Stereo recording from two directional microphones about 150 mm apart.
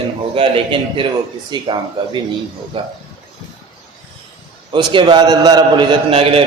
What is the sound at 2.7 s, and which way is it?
Speech, 35° right (ahead or behind).